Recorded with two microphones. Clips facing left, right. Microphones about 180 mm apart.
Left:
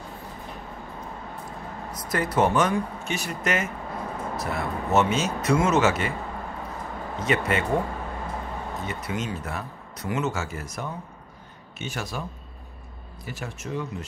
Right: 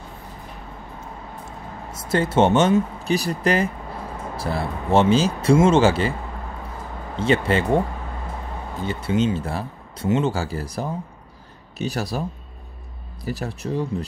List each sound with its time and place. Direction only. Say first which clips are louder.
1.9 s speech: right 6 dB; 25° right (ahead or behind)
7.2 s speech: right 5 dB; 30° right (ahead or behind)